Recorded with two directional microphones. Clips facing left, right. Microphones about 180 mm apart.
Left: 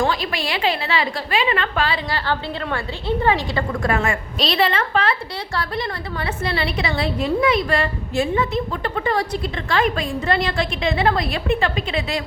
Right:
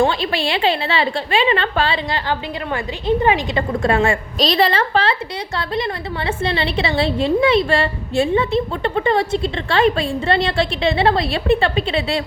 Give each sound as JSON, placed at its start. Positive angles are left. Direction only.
{"t": 0.0, "sound": "a woman's voice", "side_deg": -30}
{"t": 5.5, "sound": "a woman's voice", "side_deg": -20}